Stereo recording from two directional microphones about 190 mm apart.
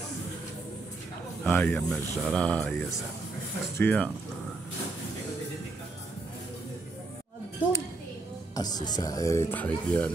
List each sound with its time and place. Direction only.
1.4 s speech: 10° left (ahead or behind)
8.5 s speech: 20° left (ahead or behind)